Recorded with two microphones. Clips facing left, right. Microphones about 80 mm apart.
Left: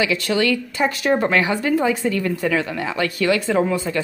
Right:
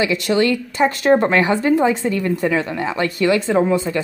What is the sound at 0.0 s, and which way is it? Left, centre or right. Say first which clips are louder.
A woman's voice: right 3 dB; right.